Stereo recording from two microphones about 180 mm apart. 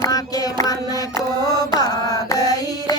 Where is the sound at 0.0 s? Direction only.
20° left (ahead or behind).